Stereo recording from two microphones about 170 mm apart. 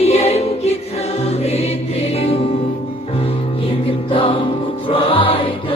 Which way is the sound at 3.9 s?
30° left (ahead or behind).